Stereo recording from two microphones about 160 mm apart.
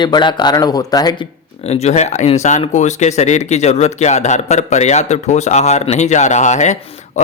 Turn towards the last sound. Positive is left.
turn(degrees=45)  # may be behind; listen again after turning